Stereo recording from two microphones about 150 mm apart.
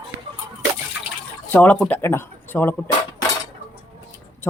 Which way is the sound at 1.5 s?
10° left (ahead or behind).